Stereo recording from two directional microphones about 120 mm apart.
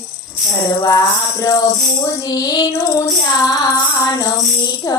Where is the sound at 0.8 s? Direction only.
30° left (ahead or behind).